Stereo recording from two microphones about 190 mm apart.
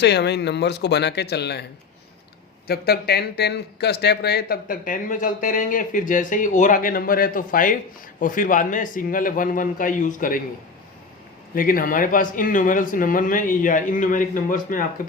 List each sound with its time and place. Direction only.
0.0 s speech: 60° left (ahead or behind)
2.6 s speech: 55° left (ahead or behind)
11.5 s speech: 45° left (ahead or behind)